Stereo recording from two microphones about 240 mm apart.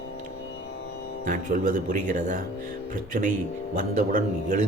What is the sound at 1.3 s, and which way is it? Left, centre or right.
Speech, right.